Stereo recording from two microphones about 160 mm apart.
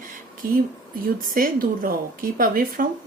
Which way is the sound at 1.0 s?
65° right (ahead or behind).